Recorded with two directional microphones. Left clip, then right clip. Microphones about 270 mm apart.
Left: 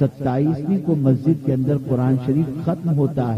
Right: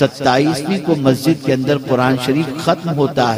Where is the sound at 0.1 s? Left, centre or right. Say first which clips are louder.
Right 8 dB; centre.